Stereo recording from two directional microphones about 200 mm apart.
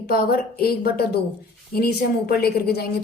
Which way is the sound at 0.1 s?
50° left (ahead or behind).